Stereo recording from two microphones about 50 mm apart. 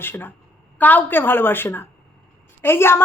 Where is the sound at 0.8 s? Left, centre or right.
Left.